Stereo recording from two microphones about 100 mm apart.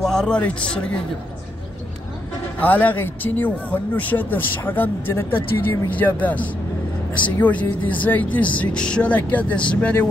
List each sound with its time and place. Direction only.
0.0 s speech: 5° left (ahead or behind)
2.6 s speech: 15° left (ahead or behind)